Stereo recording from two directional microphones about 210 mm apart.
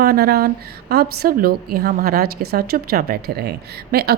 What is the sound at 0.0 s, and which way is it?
A woman's voice, 45° right (ahead or behind).